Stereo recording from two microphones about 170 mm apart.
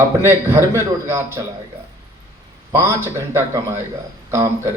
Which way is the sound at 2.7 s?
15° right (ahead or behind).